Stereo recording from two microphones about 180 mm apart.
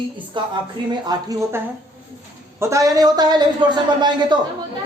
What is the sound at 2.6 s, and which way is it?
A man's voice, 15° right (ahead or behind).